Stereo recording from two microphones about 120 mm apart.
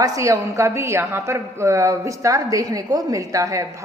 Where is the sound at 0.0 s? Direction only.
25° right (ahead or behind).